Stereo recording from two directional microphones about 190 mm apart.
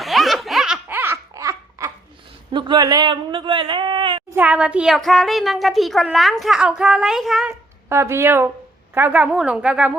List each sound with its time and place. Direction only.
0.0 s laughter: centre (ahead or behind); by 1.9 s 15° right (ahead or behind)
2.5 s speech: 25° right (ahead or behind)
4.4 s a child's voice: 5° right (ahead or behind)
7.9 s a child's voice: 15° right (ahead or behind)